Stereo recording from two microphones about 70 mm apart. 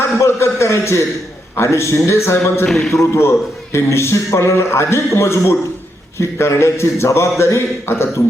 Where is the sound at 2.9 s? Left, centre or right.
Left.